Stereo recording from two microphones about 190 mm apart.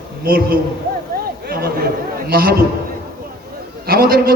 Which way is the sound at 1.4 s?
55° right (ahead or behind).